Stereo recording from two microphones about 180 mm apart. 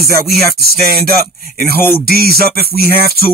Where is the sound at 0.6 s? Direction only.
60° right (ahead or behind).